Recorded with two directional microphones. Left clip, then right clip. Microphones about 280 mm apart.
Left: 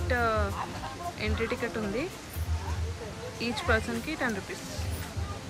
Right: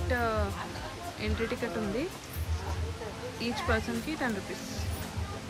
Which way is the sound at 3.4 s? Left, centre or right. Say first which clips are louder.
Left 3 dB; centre.